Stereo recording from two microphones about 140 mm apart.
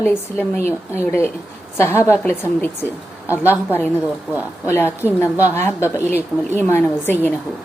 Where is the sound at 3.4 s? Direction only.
15° left (ahead or behind).